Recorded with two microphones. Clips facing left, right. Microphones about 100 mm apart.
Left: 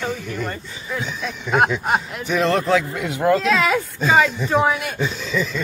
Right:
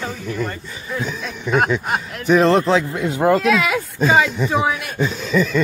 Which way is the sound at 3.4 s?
Centre (ahead or behind).